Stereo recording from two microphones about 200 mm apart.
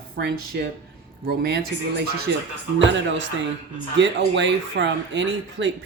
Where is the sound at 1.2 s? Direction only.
55° right (ahead or behind).